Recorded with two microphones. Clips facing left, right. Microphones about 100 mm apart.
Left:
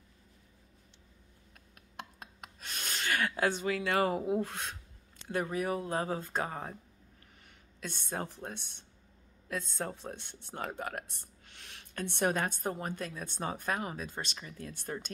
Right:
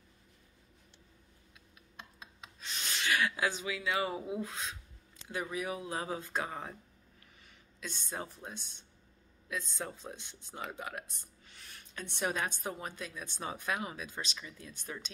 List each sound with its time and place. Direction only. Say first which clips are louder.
1.8 s a sound: left 6 dB; 60° left (ahead or behind)
5.3 s speech: left 4 dB; 45° left (ahead or behind)
7.4 s speech: left 2 dB; 55° left (ahead or behind)